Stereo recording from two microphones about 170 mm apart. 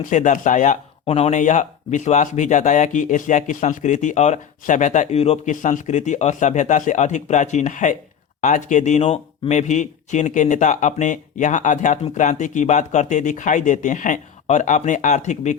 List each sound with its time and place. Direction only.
0.0 s speech: 45° left (ahead or behind)